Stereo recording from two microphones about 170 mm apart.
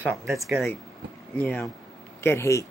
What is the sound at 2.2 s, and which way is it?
Speech, 15° left (ahead or behind).